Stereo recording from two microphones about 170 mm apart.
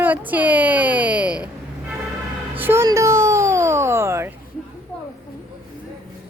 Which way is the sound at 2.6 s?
15° right (ahead or behind).